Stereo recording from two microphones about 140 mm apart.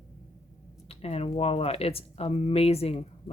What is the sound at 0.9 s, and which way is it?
Speech, 45° left (ahead or behind).